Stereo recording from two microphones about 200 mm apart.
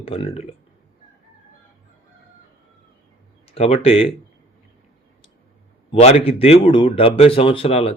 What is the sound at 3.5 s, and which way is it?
Speech, 30° left (ahead or behind).